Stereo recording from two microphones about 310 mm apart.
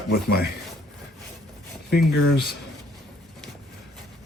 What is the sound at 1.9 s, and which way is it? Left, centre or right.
Speech, left.